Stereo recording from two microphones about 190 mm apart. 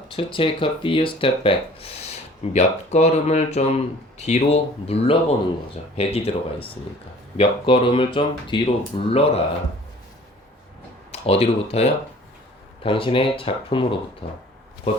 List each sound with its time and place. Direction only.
0.1 s speech: 25° left (ahead or behind)
11.1 s speech: 30° left (ahead or behind)